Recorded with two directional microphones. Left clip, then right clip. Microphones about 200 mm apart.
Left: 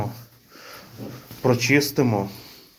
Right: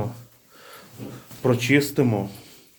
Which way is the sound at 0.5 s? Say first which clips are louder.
Left 3 dB; 5° left (ahead or behind).